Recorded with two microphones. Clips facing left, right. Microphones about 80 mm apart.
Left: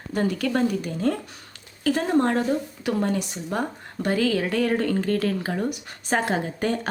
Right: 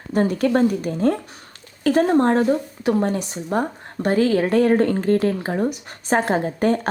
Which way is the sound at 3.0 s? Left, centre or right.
Right.